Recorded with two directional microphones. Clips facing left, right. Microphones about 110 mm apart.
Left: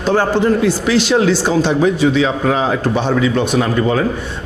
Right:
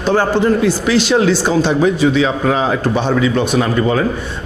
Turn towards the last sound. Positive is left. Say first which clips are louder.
# even
turn(degrees=-20)  # may be behind; listen again after turning